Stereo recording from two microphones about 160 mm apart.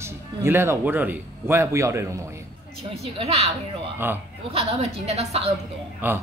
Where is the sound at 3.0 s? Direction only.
40° right (ahead or behind).